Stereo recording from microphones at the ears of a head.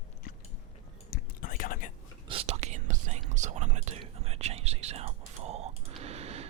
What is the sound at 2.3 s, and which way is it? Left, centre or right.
Whispering, right.